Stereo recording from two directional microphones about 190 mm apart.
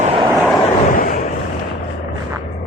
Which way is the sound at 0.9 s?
45° left (ahead or behind).